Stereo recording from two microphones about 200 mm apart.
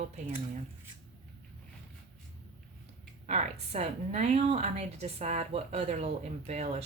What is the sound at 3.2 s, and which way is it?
A woman's voice, 30° right (ahead or behind).